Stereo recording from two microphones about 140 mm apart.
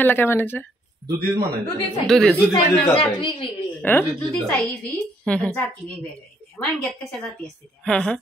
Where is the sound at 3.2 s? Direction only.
35° left (ahead or behind).